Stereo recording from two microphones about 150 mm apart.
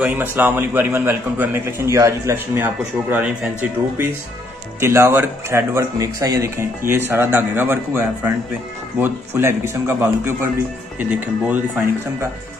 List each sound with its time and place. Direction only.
0.0 s a man's voice: 10° right (ahead or behind)
4.7 s a man's voice: 20° right (ahead or behind)